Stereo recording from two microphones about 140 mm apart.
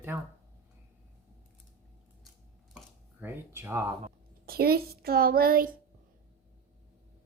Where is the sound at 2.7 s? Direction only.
15° right (ahead or behind).